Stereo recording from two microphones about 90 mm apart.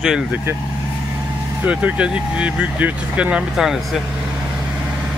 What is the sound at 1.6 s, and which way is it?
Speech, 15° right (ahead or behind).